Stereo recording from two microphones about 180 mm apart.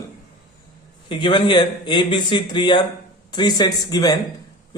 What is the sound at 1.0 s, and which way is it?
Speech, 25° left (ahead or behind).